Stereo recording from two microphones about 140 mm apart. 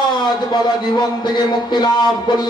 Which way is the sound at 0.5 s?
30° left (ahead or behind).